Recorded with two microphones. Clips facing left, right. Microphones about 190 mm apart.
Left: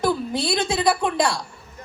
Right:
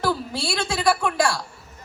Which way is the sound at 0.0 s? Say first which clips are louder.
Left 3 dB; 20° left (ahead or behind).